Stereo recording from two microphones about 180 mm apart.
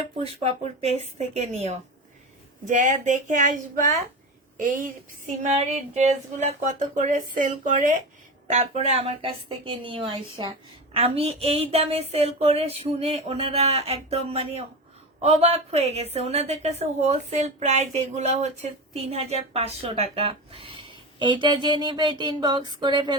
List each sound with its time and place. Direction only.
0.4 s a woman's voice: 35° right (ahead or behind)
2.6 s a sound: 45° right (ahead or behind)
8.4 s a woman's voice: 40° right (ahead or behind); by 23.1 s 25° right (ahead or behind)